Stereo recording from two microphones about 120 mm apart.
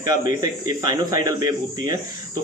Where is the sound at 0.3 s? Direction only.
30° right (ahead or behind).